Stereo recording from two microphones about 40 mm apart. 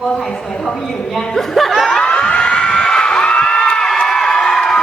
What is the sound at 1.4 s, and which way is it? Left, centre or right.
Snicker, centre.